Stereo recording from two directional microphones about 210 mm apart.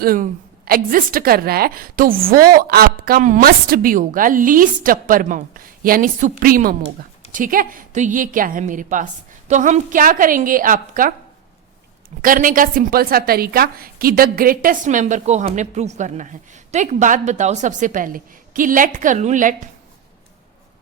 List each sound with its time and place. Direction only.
0.0 s a woman's voice: 45° right (ahead or behind)
12.2 s a woman's voice: 40° right (ahead or behind)